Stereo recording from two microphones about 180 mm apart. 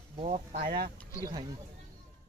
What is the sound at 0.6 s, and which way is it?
Speech, 60° right (ahead or behind).